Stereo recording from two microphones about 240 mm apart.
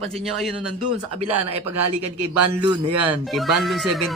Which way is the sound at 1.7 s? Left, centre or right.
Right.